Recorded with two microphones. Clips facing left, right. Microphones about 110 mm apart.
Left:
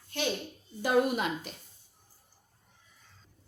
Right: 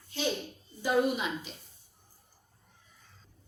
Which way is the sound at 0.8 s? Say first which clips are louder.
Left 1 dB; 55° left (ahead or behind).